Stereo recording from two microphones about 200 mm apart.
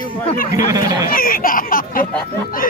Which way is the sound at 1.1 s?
45° left (ahead or behind).